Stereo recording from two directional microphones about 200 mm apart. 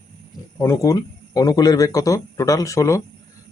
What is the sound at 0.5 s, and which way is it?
Speech, 15° left (ahead or behind).